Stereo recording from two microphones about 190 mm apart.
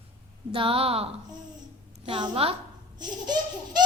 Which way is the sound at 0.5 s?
30° right (ahead or behind).